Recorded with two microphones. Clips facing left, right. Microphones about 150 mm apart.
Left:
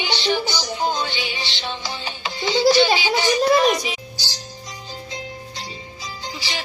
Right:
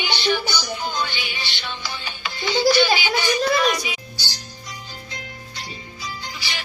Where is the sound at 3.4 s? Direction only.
40° left (ahead or behind).